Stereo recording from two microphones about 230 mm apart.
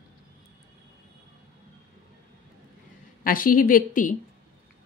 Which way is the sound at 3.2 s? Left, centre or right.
Left.